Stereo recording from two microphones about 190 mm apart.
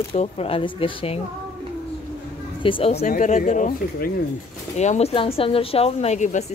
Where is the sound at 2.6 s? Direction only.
25° left (ahead or behind).